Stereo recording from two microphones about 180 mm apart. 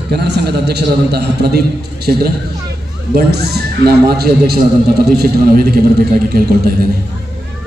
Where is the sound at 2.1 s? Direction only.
55° right (ahead or behind).